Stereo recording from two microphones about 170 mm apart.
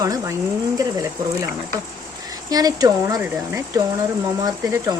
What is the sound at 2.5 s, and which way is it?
Speech, 20° right (ahead or behind).